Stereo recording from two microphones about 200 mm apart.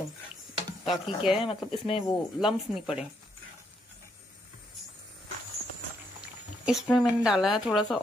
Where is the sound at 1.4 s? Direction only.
25° left (ahead or behind).